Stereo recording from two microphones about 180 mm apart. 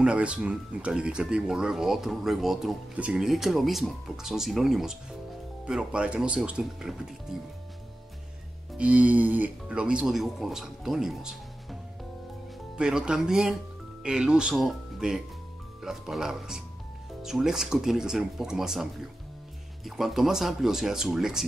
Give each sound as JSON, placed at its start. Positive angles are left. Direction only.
{"t": 0.0, "sound": "speech", "side_deg": -5}
{"t": 8.7, "sound": "speech", "side_deg": -5}
{"t": 12.7, "sound": "speech", "side_deg": -5}